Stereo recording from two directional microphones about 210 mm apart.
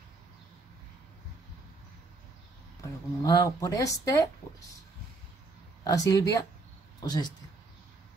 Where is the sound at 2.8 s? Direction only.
15° left (ahead or behind).